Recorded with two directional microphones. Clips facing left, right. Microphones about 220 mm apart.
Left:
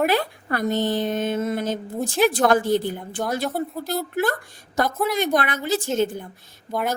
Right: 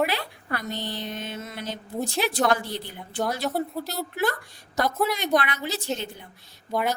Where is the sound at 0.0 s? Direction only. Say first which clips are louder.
Left 5 dB; 50° left (ahead or behind).